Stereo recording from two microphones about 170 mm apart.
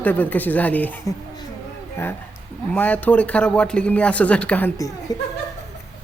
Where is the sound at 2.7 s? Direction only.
10° left (ahead or behind).